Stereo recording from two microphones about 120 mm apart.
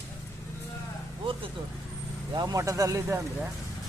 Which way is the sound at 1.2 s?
45° right (ahead or behind).